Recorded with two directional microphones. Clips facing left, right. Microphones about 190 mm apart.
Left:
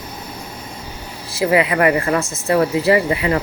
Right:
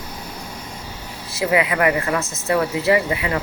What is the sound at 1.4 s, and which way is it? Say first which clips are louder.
Speech: left 3 dB; 35° left (ahead or behind).